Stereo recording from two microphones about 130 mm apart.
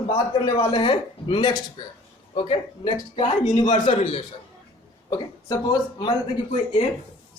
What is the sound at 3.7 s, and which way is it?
Speech, 65° left (ahead or behind).